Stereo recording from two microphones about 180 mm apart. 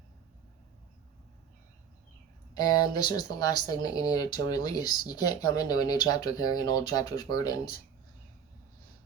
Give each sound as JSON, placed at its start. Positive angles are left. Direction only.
{"t": 2.6, "sound": "speech", "side_deg": 20}